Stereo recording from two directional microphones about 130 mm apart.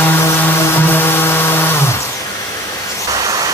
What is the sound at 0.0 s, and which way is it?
Chainsaw, 20° left (ahead or behind).